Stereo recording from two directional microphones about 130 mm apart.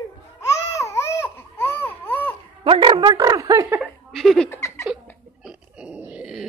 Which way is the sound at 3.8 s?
Centre (ahead or behind).